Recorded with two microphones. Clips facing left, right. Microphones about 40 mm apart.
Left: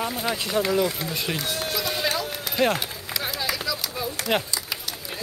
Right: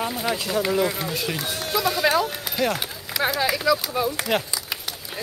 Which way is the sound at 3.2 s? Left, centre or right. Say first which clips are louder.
Right 9 dB; right.